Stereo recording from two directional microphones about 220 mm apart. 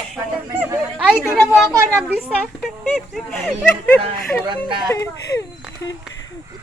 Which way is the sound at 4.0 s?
20° right (ahead or behind).